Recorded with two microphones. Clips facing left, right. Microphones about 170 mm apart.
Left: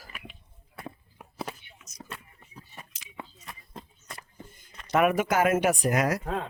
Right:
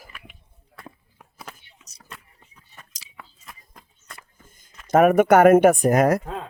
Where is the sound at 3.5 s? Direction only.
Centre (ahead or behind).